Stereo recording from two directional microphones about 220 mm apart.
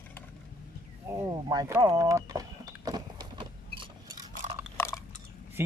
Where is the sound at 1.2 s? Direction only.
15° right (ahead or behind).